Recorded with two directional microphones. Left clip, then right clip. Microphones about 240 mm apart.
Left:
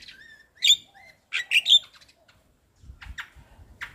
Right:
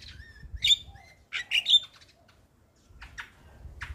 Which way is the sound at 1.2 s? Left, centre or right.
Centre.